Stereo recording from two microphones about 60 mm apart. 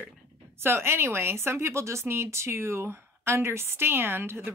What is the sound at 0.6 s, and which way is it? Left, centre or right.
A woman's voice, right.